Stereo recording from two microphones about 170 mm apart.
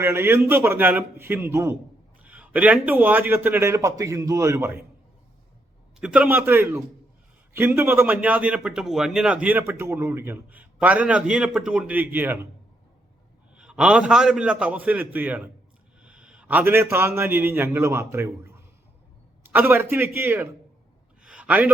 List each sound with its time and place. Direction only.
0.0 s speech: 15° right (ahead or behind)
6.0 s speech: 5° right (ahead or behind)
13.6 s a man's voice: 5° right (ahead or behind)
19.5 s speech: 10° right (ahead or behind)
21.2 s a sound: 5° right (ahead or behind)